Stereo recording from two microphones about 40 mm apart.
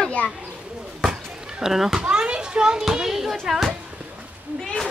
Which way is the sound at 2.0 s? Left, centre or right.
Right.